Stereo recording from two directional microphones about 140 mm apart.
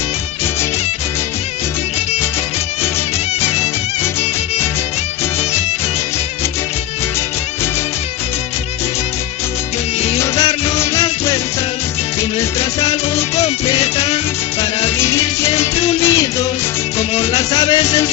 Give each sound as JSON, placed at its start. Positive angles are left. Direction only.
{"t": 10.2, "sound": "music", "side_deg": 20}
{"t": 12.8, "sound": "music", "side_deg": 45}
{"t": 14.9, "sound": "music", "side_deg": 20}